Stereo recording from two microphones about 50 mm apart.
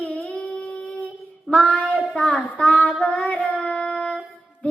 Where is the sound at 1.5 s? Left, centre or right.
Left.